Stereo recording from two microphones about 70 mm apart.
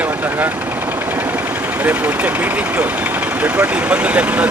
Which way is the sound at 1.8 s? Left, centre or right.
Right.